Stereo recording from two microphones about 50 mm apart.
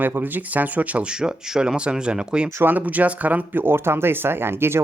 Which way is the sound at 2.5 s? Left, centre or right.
Right.